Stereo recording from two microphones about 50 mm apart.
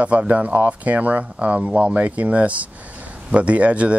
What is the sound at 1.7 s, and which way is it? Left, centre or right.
Speech, centre.